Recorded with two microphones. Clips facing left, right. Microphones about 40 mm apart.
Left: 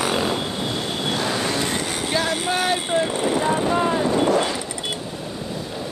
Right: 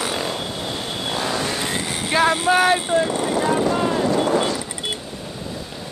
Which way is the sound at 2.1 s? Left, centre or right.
Right.